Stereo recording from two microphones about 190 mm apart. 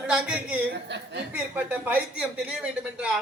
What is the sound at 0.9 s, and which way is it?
Speech, 65° right (ahead or behind).